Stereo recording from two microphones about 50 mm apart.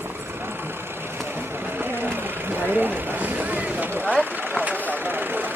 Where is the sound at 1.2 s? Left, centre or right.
Right.